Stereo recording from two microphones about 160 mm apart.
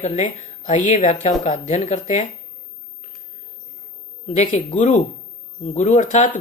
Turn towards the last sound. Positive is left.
turn(degrees=50)  # may be behind; listen again after turning